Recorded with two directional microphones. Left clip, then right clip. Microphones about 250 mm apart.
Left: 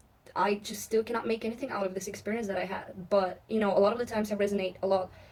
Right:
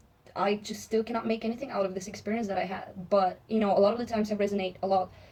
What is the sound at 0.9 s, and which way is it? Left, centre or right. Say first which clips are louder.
A woman's voice: even; centre.